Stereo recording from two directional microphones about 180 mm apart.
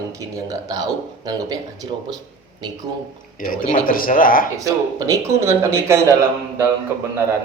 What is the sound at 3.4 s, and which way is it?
A man's voice, 50° left (ahead or behind).